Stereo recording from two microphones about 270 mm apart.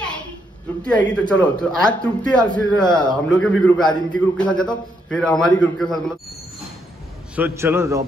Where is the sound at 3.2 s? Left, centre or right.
Centre.